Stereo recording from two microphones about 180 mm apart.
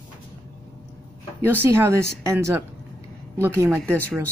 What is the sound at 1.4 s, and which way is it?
Speech, 10° right (ahead or behind).